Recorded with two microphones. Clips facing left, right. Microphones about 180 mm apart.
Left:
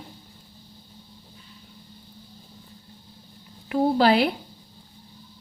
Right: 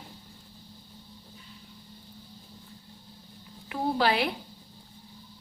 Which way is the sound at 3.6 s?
40° left (ahead or behind).